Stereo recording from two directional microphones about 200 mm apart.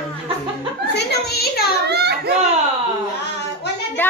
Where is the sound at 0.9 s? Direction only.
55° left (ahead or behind).